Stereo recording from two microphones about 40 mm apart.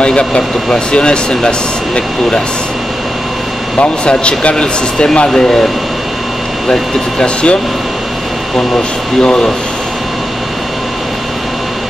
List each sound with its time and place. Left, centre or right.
0.0 s speech: left
3.8 s speech: left
6.7 s speech: left
9.2 s speech: left